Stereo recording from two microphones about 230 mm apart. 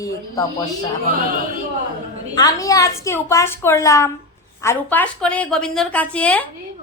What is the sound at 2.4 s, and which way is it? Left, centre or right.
A woman's voice, centre.